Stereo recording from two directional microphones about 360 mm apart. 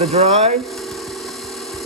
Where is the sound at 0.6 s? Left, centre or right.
Centre.